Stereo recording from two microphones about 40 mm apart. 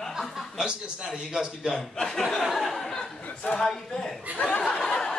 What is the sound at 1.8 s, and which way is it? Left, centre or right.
Speech, centre.